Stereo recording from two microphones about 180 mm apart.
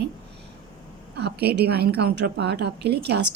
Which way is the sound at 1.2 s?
65° right (ahead or behind).